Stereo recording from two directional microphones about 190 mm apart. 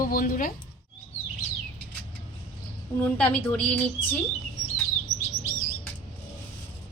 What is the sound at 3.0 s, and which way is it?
Speech, 10° left (ahead or behind).